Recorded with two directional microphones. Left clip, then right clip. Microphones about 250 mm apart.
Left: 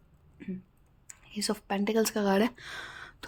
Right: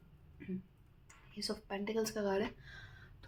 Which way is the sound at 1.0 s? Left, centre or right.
Left.